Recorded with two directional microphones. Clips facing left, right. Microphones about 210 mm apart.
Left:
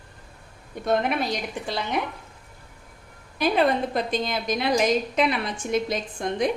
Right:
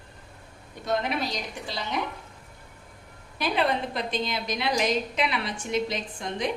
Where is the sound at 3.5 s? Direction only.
45° left (ahead or behind).